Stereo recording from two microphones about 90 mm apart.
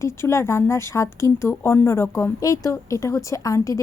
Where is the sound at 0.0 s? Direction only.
30° left (ahead or behind).